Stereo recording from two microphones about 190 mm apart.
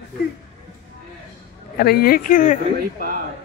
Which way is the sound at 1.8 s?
55° left (ahead or behind).